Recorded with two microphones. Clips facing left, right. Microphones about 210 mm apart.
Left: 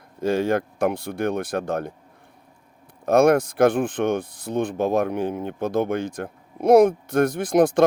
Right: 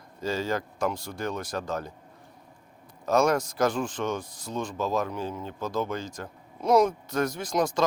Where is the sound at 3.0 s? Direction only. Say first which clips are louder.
Left 7 dB; 55° left (ahead or behind).